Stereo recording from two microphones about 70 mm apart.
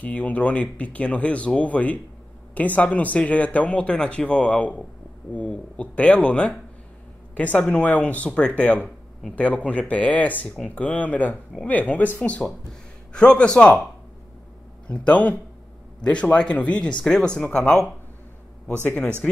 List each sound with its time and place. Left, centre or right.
0.0 s speech: left
14.9 s speech: centre